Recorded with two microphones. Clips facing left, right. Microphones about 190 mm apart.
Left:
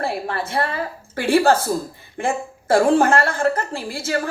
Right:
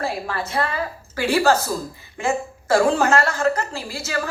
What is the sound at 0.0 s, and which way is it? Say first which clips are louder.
A woman's voice: left 2 dB; 60° left (ahead or behind).